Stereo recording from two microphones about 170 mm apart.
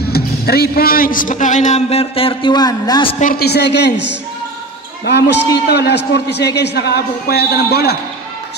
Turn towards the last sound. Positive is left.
turn(degrees=70)  # may be behind; listen again after turning